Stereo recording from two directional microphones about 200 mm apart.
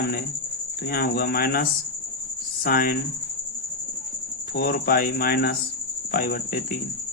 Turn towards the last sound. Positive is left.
turn(degrees=45)  # may be behind; listen again after turning